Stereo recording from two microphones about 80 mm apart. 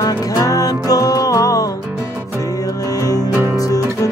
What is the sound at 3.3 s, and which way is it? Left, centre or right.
Music, right.